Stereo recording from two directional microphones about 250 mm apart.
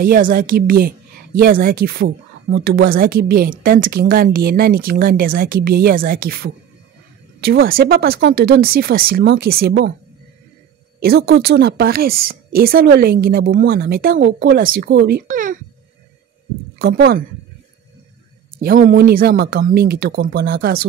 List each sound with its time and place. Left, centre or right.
0.0 s a woman's voice: right
11.0 s a woman's voice: right
16.7 s speech: right
18.6 s a woman's voice: right